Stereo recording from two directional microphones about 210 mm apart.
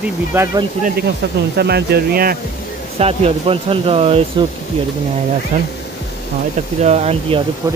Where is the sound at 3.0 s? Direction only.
30° right (ahead or behind).